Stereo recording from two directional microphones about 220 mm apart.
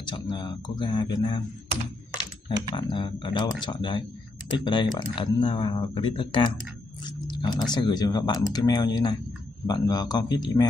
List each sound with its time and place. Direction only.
0.0 s speech: 20° left (ahead or behind)
2.7 s speech: 25° left (ahead or behind)
7.2 s a sound: 20° left (ahead or behind)
7.7 s speech: 20° left (ahead or behind)